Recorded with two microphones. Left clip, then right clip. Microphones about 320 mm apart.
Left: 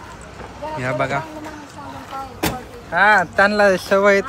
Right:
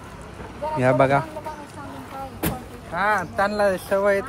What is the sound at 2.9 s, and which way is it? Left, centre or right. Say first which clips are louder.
Speech: left 8 dB; left.